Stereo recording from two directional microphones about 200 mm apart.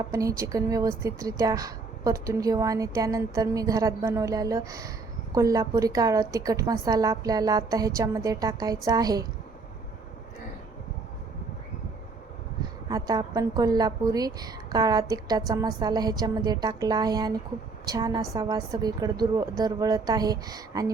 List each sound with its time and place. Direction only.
0.1 s speech: 15° right (ahead or behind)
12.9 s a woman's voice: 20° right (ahead or behind)